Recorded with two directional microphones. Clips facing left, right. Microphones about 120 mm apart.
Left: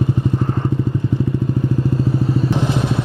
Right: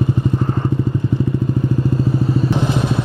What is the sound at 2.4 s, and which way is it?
Vehicle, 10° right (ahead or behind).